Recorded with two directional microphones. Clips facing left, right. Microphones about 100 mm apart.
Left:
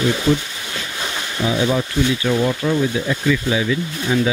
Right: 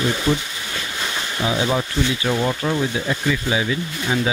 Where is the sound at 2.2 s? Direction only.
15° right (ahead or behind).